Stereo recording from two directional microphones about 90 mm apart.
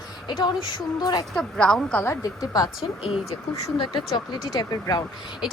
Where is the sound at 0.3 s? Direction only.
55° left (ahead or behind).